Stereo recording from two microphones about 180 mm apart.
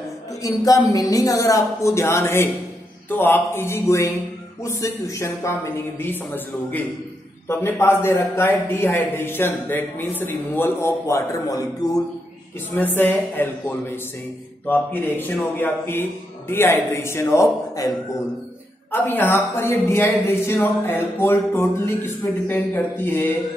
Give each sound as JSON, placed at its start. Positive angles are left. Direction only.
{"t": 0.4, "sound": "a man's voice", "side_deg": 20}